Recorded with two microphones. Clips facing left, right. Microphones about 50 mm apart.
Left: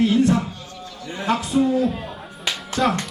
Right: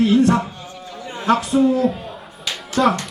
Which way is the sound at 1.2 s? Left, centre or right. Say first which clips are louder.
Right 4 dB; right.